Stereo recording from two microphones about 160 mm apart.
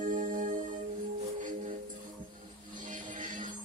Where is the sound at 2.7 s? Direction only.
55° right (ahead or behind).